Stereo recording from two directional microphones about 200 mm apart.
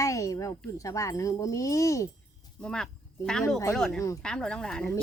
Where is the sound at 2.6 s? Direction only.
5° left (ahead or behind).